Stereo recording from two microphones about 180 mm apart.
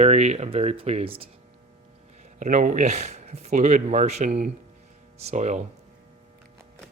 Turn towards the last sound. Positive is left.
turn(degrees=-40)  # may be behind; listen again after turning